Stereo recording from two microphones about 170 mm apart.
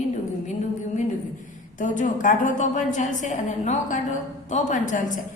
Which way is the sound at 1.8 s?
50° left (ahead or behind).